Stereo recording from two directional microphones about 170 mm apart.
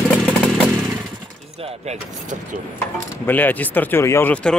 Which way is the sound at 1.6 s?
40° right (ahead or behind).